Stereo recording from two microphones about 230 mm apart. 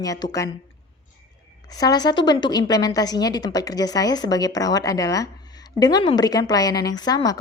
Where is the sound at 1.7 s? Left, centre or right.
Centre.